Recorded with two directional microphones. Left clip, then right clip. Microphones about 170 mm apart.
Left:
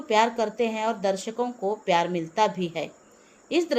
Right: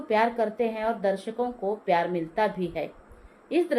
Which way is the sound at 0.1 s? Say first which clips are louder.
Left 2 dB; 35° left (ahead or behind).